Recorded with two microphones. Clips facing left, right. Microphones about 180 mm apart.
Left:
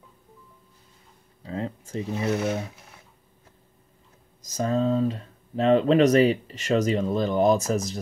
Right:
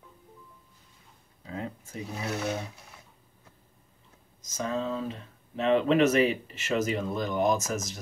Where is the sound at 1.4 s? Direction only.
35° left (ahead or behind).